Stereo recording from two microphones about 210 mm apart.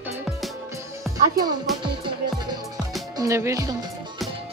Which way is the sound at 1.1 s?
20° right (ahead or behind).